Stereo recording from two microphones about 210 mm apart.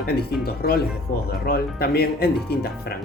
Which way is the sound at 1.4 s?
45° left (ahead or behind).